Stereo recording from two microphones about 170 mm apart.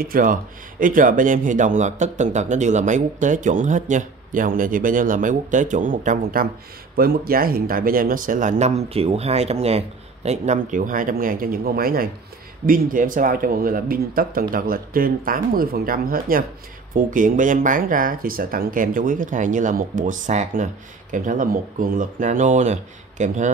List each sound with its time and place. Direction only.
0.0 s speech: 55° right (ahead or behind)